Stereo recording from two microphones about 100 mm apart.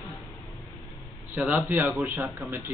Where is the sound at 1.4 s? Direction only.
15° right (ahead or behind).